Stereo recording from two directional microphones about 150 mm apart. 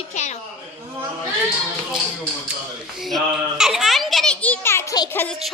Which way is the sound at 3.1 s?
Centre (ahead or behind).